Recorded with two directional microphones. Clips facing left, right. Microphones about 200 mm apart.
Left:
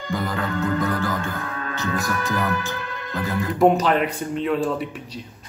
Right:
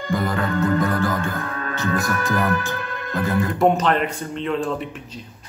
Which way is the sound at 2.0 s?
50° right (ahead or behind).